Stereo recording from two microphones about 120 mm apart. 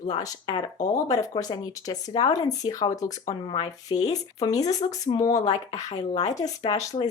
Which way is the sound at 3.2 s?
40° left (ahead or behind).